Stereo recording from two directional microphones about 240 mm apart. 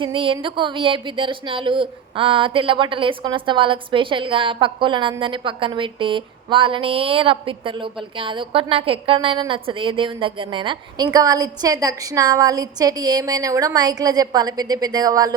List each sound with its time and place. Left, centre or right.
0.0 s a woman's voice: right